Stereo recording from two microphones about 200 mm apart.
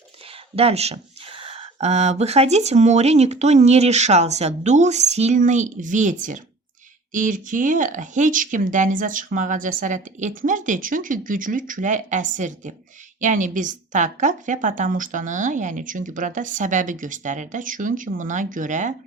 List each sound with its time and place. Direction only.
0.5 s speech: 30° right (ahead or behind)